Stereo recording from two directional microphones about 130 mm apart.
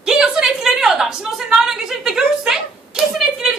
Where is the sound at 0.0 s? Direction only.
5° right (ahead or behind).